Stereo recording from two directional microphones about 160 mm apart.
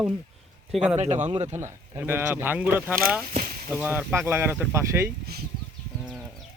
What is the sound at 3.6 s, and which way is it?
Speech, 10° right (ahead or behind).